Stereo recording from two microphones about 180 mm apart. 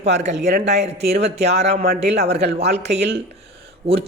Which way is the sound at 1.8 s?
65° right (ahead or behind).